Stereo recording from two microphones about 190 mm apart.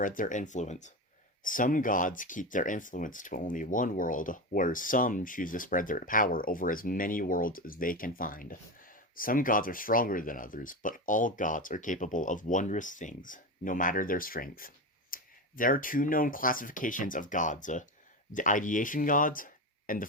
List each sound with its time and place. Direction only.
0.0 s speech: 45° left (ahead or behind)